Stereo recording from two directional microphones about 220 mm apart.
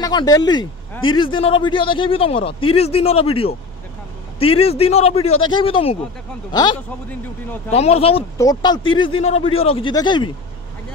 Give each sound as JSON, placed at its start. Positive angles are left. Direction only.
{"t": 0.0, "sound": "a man's voice", "side_deg": 20}